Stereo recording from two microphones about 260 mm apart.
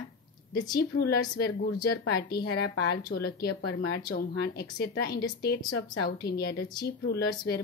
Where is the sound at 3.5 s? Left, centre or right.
Left.